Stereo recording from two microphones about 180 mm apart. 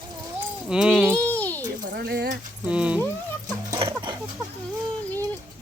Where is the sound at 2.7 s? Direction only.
5° right (ahead or behind).